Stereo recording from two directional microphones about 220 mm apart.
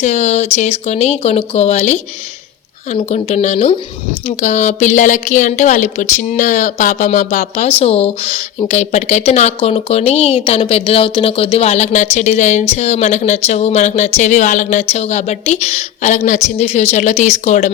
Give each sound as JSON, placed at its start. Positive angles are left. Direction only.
{"t": 0.0, "sound": "a woman's voice", "side_deg": 30}